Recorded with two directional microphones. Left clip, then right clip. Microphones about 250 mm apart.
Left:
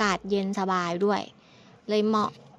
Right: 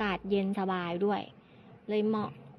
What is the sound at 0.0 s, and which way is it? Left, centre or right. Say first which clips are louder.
A woman's voice: left 5 dB; left.